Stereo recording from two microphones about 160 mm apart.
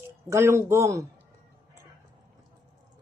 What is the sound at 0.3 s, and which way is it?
Speech, 15° right (ahead or behind).